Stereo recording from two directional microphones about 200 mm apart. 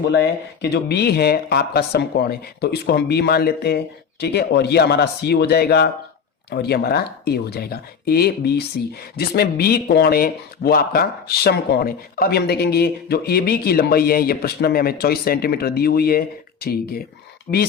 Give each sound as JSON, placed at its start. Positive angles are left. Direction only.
{"t": 0.0, "sound": "speech", "side_deg": 60}